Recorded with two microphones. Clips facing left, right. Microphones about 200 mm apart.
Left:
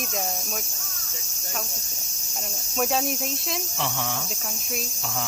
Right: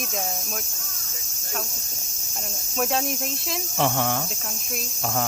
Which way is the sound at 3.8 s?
55° right (ahead or behind).